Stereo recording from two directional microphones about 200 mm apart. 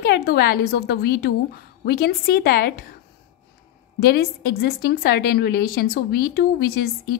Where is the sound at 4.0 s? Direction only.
50° left (ahead or behind).